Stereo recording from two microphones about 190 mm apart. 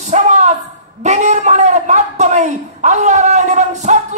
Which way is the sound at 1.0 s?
40° right (ahead or behind).